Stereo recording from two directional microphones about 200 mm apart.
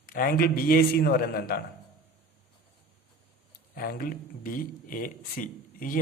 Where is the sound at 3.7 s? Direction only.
45° left (ahead or behind).